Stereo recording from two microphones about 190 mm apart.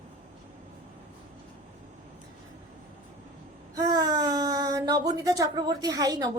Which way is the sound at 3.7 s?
20° right (ahead or behind).